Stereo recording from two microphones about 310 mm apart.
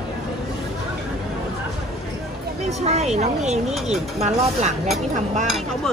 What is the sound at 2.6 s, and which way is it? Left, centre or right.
Speech, right.